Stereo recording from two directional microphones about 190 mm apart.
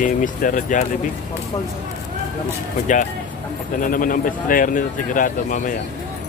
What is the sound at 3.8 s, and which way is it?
Speech, 45° left (ahead or behind).